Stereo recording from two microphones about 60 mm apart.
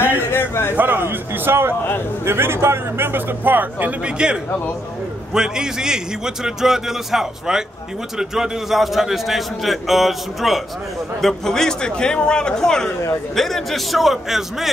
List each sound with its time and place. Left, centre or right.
0.2 s a sound: left
0.7 s a man's voice: right
4.0 s a man's voice: centre